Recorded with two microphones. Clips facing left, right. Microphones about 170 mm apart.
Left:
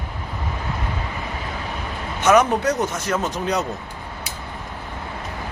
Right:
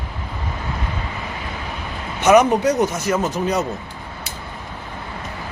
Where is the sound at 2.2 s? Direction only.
10° right (ahead or behind).